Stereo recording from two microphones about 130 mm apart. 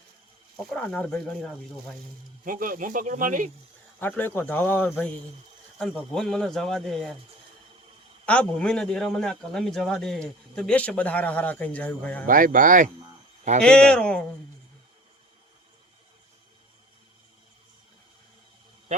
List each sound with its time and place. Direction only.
0.5 s a man's voice: 5° left (ahead or behind)
2.4 s speech: 90° right
4.0 s a man's voice: 15° left (ahead or behind)
5.8 s speech: centre (ahead or behind)
8.3 s a man's voice: 10° left (ahead or behind)
12.2 s speech: 90° right
13.6 s a man's voice: 5° left (ahead or behind)